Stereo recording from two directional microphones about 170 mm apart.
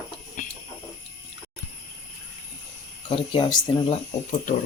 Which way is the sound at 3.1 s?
30° left (ahead or behind).